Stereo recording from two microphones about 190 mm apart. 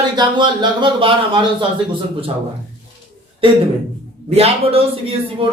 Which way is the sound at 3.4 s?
30° right (ahead or behind).